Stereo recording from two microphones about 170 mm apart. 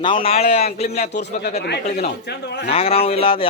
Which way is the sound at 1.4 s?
75° left (ahead or behind).